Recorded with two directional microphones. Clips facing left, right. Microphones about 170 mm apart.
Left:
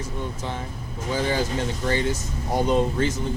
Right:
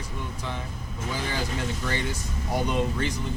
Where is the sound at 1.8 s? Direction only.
30° left (ahead or behind).